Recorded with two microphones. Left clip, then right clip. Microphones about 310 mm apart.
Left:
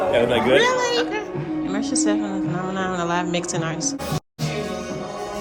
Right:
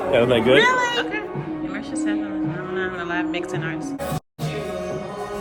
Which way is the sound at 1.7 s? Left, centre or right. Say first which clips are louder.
Left 5 dB; centre.